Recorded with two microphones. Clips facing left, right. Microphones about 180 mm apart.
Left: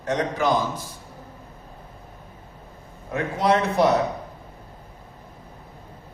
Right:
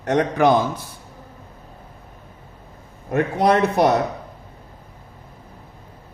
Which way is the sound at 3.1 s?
60° right (ahead or behind).